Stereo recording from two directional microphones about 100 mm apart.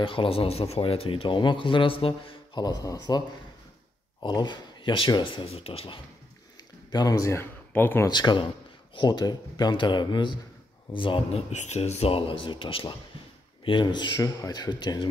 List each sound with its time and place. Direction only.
0.0 s speech: 60° left (ahead or behind)
2.5 s speech: 40° left (ahead or behind); by 5.9 s 75° left (ahead or behind)
6.9 s speech: 40° left (ahead or behind); by 8.1 s 20° left (ahead or behind)
8.1 s speech: 50° left (ahead or behind)
13.7 s speech: 50° left (ahead or behind)